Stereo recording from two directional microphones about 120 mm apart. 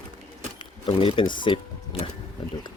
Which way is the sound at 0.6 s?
50° left (ahead or behind).